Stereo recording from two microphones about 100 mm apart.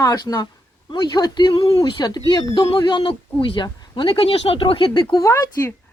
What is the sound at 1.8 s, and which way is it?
Speech, 45° left (ahead or behind).